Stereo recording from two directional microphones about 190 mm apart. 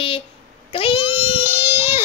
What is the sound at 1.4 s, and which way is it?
Speech, 10° right (ahead or behind).